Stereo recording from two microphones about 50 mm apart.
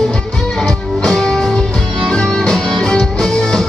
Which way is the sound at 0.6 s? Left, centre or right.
Centre.